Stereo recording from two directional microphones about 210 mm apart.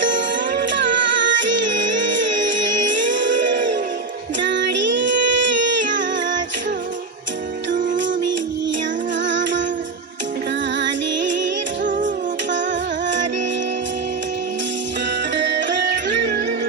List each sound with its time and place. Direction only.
0.8 s music: 60° right (ahead or behind)
4.4 s female singing: 60° right (ahead or behind)
9.2 s music: 60° right (ahead or behind)
10.8 s music: 60° right (ahead or behind)
11.9 s music: 40° right (ahead or behind)